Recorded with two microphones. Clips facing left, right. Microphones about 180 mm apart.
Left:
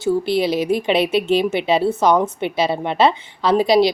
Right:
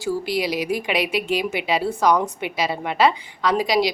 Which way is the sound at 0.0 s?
25° left (ahead or behind).